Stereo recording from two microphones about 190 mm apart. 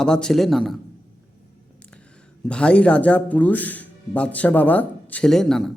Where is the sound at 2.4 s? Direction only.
5° left (ahead or behind).